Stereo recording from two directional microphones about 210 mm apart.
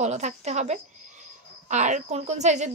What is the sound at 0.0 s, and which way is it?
Speech, 35° right (ahead or behind).